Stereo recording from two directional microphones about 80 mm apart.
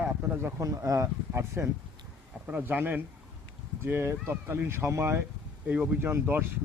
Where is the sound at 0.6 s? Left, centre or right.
Right.